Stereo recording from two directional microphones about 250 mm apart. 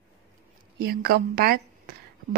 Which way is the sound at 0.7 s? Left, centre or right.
Right.